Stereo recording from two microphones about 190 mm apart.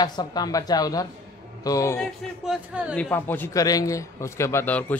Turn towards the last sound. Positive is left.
turn(degrees=10)  # may be behind; listen again after turning